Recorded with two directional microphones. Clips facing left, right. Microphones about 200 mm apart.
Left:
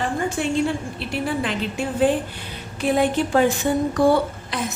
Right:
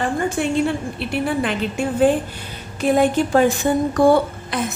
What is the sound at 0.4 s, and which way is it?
A woman's voice, 55° right (ahead or behind).